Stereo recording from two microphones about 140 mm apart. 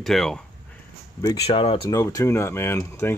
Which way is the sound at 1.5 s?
45° left (ahead or behind).